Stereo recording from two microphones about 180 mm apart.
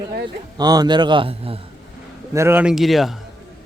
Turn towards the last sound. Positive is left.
turn(degrees=0)  # may be behind; listen again after turning